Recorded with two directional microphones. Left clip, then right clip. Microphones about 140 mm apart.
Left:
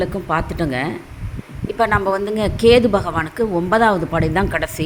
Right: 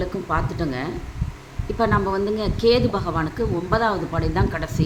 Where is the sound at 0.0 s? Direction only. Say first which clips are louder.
Left 4 dB; 65° left (ahead or behind).